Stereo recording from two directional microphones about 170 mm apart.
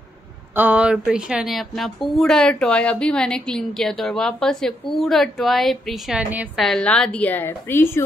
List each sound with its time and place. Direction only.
0.6 s speech: 10° right (ahead or behind); by 8.0 s 15° left (ahead or behind)